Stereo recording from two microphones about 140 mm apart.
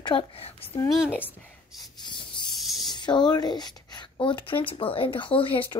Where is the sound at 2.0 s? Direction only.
35° left (ahead or behind).